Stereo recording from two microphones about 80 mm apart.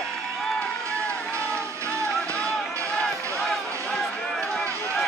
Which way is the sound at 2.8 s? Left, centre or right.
Centre.